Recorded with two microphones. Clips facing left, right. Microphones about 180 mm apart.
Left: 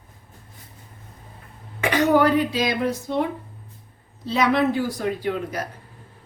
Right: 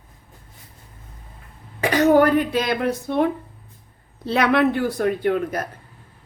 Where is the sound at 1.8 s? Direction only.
45° right (ahead or behind).